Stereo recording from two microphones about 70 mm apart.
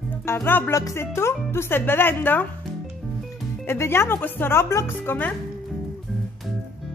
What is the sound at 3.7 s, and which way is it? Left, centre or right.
Speech, left.